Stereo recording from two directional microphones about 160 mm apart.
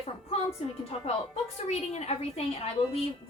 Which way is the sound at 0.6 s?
45° left (ahead or behind).